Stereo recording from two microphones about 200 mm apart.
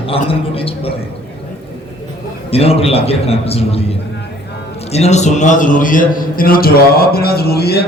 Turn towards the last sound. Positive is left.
turn(degrees=55)  # may be behind; listen again after turning